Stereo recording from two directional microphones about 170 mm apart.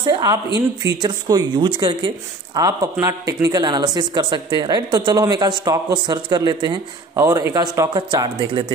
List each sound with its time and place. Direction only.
0.1 s speech: 25° right (ahead or behind)